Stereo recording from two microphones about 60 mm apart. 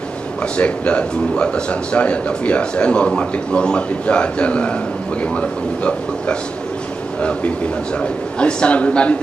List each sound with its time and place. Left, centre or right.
0.6 s a man's voice: left